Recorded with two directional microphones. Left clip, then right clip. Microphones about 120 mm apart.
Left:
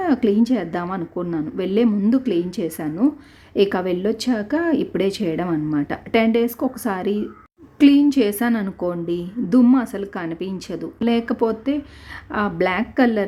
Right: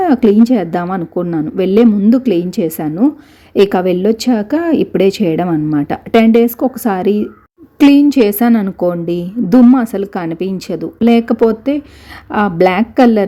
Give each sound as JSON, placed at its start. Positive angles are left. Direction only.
{"t": 0.0, "sound": "speech", "side_deg": -35}